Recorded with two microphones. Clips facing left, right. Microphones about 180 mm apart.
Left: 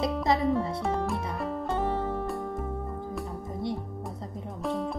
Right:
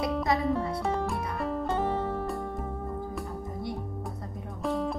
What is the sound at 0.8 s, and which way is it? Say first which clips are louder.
Music: left 1 dB; centre (ahead or behind).